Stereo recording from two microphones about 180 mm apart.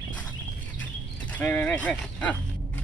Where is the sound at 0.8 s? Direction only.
10° left (ahead or behind).